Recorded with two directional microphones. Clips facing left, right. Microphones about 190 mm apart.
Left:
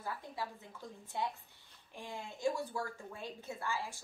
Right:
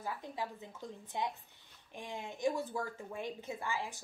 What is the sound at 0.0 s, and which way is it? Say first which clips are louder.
Speech: right 2 dB; 20° right (ahead or behind).